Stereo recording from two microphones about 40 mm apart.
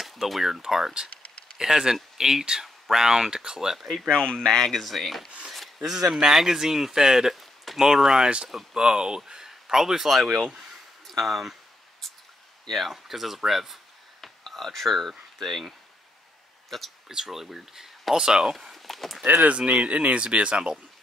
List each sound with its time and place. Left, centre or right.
0.0 s speech: centre
4.1 s speech: left; by 5.3 s centre
5.9 s speech: centre
7.3 s a sound: centre
7.8 s speech: centre
12.6 s speech: centre
14.2 s speech: centre
16.7 s speech: centre
17.1 s speech: centre
18.4 s a sound: centre
19.3 s speech: right